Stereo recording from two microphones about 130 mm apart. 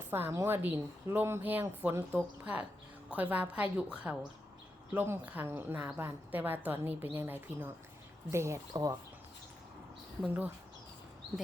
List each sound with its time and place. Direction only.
0.1 s a woman's voice: 15° right (ahead or behind)
10.2 s a woman's voice: 15° right (ahead or behind)